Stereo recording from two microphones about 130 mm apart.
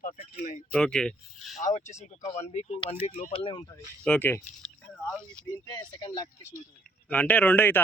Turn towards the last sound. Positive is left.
turn(degrees=15)  # may be behind; listen again after turning